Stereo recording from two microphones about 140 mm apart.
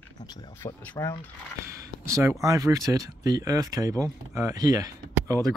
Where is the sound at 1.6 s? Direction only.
20° right (ahead or behind).